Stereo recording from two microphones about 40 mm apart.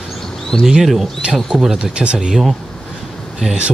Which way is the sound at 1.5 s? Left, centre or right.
Centre.